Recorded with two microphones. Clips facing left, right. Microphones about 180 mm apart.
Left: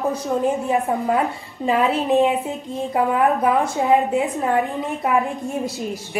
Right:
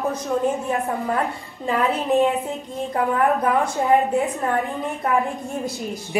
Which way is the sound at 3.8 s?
20° left (ahead or behind).